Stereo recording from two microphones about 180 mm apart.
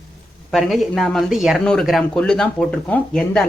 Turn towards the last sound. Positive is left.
turn(degrees=5)  # may be behind; listen again after turning